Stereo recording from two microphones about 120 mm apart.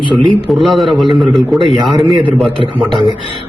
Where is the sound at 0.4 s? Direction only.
Centre (ahead or behind).